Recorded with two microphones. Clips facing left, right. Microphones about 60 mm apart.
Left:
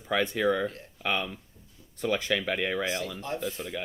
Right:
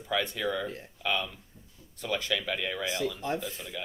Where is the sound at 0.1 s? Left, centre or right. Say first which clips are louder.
Left 4 dB; left.